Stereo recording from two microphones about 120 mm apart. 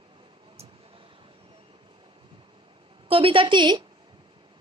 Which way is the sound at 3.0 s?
50° right (ahead or behind).